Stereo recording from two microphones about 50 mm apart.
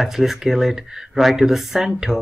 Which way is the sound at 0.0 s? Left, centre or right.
Centre.